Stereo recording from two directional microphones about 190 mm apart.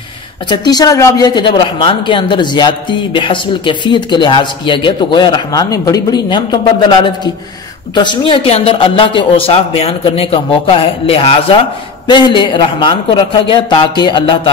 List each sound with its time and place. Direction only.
0.5 s speech: 20° left (ahead or behind)